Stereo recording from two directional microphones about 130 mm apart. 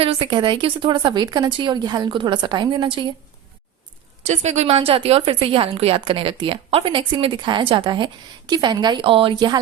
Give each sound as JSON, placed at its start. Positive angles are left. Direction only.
{"t": 0.0, "sound": "speech", "side_deg": -45}
{"t": 4.3, "sound": "speech", "side_deg": -60}